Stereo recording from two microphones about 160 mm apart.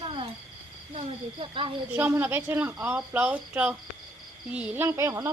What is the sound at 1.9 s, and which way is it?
Speech, 15° right (ahead or behind).